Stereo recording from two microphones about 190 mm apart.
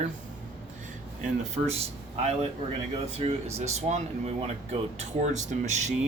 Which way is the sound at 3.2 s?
35° right (ahead or behind).